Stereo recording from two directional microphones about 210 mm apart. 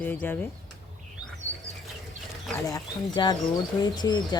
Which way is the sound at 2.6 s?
20° left (ahead or behind).